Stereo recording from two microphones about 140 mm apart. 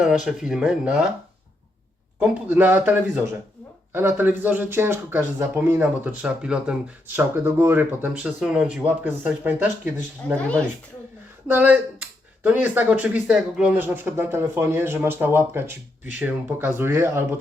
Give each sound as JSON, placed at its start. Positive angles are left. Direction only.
{"t": 0.3, "sound": "speech", "side_deg": -5}
{"t": 2.1, "sound": "speech", "side_deg": -10}
{"t": 7.2, "sound": "speech", "side_deg": -15}
{"t": 10.2, "sound": "speech", "side_deg": 10}
{"t": 11.4, "sound": "speech", "side_deg": -10}